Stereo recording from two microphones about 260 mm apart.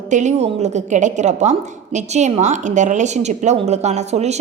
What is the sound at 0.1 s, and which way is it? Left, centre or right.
A woman's voice, right.